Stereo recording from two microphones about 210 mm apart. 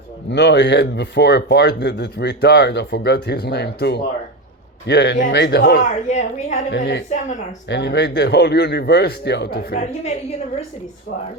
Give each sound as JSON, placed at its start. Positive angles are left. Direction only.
{"t": 0.3, "sound": "a man's voice", "side_deg": 55}
{"t": 5.8, "sound": "a woman's voice", "side_deg": 35}
{"t": 6.7, "sound": "a man's voice", "side_deg": 55}